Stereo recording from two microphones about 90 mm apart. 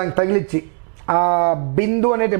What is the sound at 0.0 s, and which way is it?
A man's voice, 15° right (ahead or behind).